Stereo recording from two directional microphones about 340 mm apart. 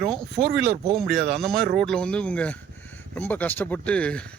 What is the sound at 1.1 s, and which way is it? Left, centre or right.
Speech, right.